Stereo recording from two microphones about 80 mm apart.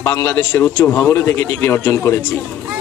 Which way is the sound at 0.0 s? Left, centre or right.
Left.